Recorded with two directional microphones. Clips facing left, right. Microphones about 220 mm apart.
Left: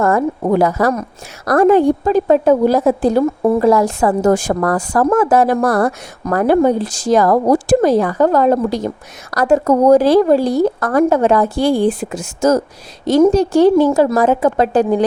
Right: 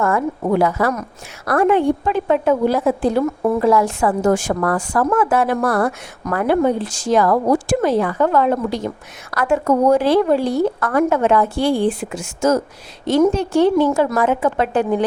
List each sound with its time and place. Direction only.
0.0 s a woman's voice: 40° left (ahead or behind)